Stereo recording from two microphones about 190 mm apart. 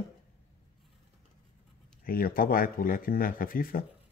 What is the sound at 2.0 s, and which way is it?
Speech, 50° left (ahead or behind).